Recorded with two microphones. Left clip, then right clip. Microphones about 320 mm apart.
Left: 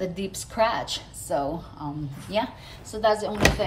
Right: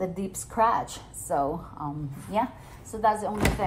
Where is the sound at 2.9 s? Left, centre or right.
Centre.